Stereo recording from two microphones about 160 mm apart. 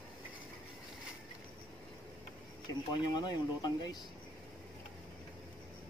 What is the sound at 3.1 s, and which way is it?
Speech, 25° left (ahead or behind).